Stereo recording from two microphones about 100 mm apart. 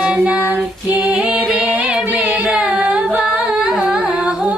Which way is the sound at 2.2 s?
5° right (ahead or behind).